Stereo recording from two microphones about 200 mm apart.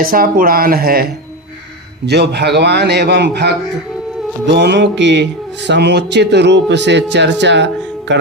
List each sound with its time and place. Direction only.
0.0 s speech: 45° right (ahead or behind)
2.0 s music: 55° right (ahead or behind)